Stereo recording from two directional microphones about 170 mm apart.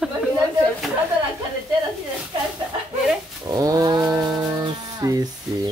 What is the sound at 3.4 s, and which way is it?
Speech, 20° right (ahead or behind).